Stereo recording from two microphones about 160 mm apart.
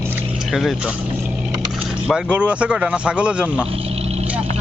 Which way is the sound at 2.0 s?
5° right (ahead or behind).